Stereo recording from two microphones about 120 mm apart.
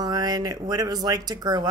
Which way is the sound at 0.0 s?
35° right (ahead or behind).